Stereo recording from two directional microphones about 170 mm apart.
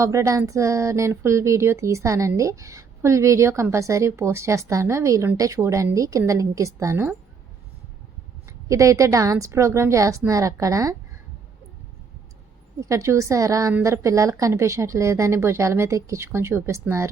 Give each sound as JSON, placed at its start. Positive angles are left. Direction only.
{"t": 0.0, "sound": "speech", "side_deg": -20}
{"t": 8.4, "sound": "a woman's voice", "side_deg": -20}
{"t": 12.8, "sound": "speech", "side_deg": -20}